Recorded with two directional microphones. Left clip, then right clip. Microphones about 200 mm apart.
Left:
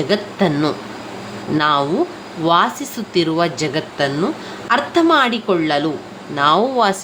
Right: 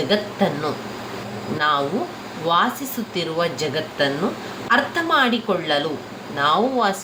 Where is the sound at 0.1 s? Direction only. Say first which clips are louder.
Left 4 dB; 45° left (ahead or behind).